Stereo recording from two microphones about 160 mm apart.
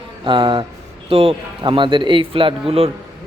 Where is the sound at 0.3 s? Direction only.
30° right (ahead or behind).